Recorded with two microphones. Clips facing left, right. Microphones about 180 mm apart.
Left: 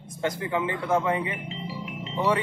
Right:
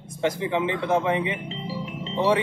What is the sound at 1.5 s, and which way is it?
Music, 30° right (ahead or behind).